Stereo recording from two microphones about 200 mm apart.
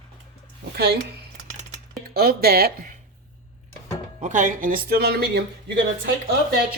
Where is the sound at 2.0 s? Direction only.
50° right (ahead or behind).